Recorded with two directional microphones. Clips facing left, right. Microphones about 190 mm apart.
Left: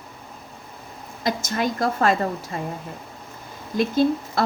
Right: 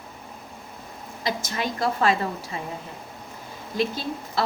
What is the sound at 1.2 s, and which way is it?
A woman's voice, 45° left (ahead or behind).